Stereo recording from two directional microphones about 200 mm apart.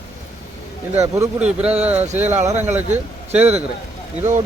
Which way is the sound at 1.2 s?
5° right (ahead or behind).